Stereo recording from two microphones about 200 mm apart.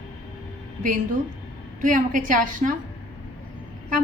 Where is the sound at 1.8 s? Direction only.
40° right (ahead or behind).